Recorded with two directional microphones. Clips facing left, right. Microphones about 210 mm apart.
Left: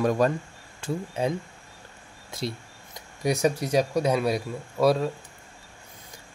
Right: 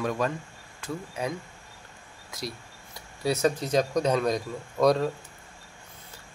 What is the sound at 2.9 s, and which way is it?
Speech, 15° left (ahead or behind).